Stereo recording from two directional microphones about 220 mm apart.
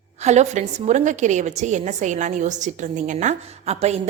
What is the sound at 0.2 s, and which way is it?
A woman's voice, 30° right (ahead or behind).